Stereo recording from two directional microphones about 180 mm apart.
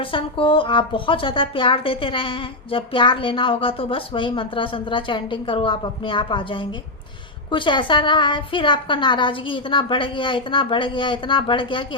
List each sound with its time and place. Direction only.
0.0 s a woman's voice: 30° left (ahead or behind)